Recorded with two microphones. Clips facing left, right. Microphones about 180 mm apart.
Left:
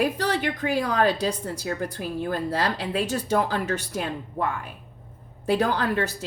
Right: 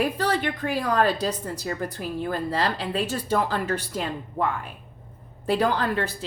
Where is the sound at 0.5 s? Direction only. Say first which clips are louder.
Even; 45° left (ahead or behind).